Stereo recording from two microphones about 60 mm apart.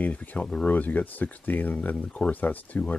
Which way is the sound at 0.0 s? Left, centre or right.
Left.